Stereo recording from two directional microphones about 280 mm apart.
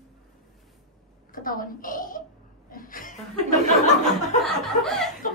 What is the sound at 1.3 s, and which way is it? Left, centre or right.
A woman's voice, left.